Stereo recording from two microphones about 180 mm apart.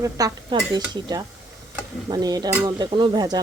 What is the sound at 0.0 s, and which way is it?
Speech, 20° right (ahead or behind).